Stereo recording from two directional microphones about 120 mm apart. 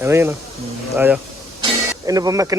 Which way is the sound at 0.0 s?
20° right (ahead or behind).